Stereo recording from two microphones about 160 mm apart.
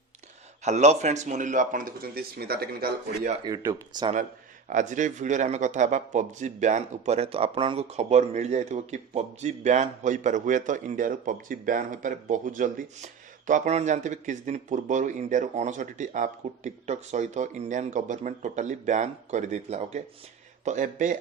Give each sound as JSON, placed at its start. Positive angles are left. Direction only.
{"t": 0.6, "sound": "speech", "side_deg": -45}
{"t": 3.4, "sound": "speech", "side_deg": -25}
{"t": 4.7, "sound": "speech", "side_deg": -50}